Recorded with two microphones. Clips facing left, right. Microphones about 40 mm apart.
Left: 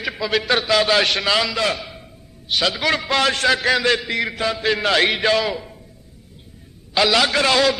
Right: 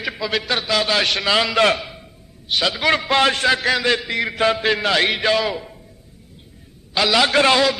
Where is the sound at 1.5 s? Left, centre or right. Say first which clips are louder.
Right 5 dB; right.